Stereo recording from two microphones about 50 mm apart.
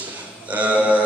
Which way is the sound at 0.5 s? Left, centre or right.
Right.